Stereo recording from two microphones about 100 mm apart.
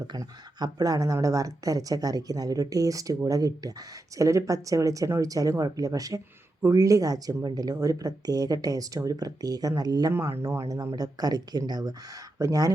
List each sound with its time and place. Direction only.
0.1 s speech: 40° right (ahead or behind)